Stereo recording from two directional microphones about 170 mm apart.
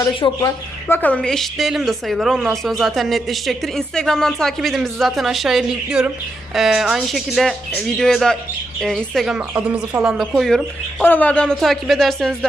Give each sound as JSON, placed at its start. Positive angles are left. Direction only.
{"t": 0.0, "sound": "speech", "side_deg": 25}
{"t": 0.9, "sound": "a woman's voice", "side_deg": 10}
{"t": 11.0, "sound": "a woman's voice", "side_deg": 10}